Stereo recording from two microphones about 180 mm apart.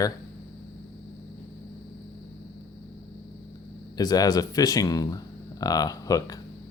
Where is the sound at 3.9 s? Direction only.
20° left (ahead or behind).